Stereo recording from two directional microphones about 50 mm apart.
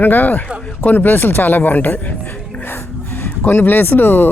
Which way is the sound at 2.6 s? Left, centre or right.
Left.